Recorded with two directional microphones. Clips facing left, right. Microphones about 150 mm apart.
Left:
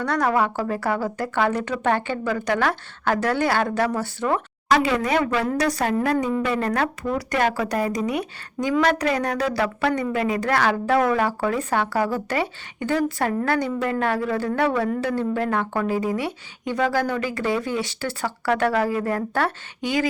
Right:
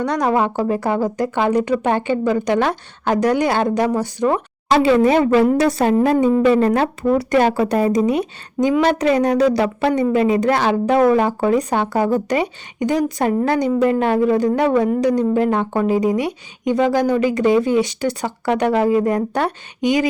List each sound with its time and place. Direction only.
0.0 s speech: 15° right (ahead or behind)